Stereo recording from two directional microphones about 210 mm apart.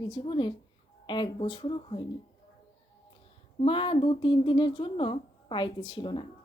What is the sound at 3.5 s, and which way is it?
Speech, 25° left (ahead or behind).